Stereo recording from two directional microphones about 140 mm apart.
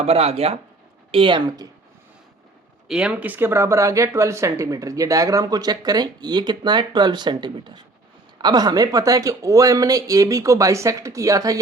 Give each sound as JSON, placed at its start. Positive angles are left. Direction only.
{"t": 0.0, "sound": "a woman's voice", "side_deg": -45}
{"t": 2.8, "sound": "speech", "side_deg": -5}